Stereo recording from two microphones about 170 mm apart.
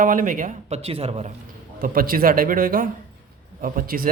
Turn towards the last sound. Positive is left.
turn(degrees=-55)  # may be behind; listen again after turning